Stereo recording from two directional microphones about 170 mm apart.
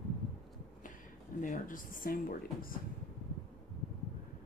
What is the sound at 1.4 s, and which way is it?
Speech, 50° left (ahead or behind).